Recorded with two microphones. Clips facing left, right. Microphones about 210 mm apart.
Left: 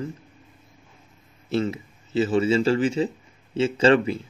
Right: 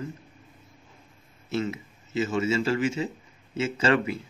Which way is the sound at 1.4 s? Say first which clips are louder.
Left 4 dB; 30° left (ahead or behind).